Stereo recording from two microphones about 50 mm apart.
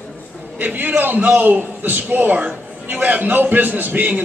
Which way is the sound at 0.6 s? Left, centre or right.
Right.